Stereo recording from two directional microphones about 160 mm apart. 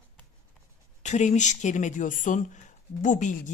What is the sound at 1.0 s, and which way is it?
Speech, 45° left (ahead or behind).